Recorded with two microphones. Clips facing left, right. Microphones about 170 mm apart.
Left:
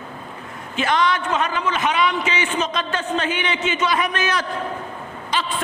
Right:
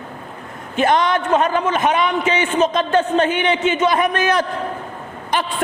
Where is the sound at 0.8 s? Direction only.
50° right (ahead or behind).